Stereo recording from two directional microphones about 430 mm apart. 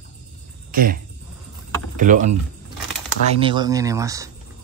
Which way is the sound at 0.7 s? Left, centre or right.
Centre.